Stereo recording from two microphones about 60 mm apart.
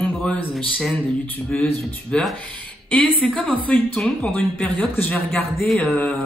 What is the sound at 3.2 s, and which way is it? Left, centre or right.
Speech, centre.